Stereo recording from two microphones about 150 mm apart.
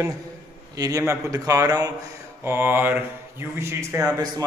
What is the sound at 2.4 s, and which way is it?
Speech, 15° right (ahead or behind).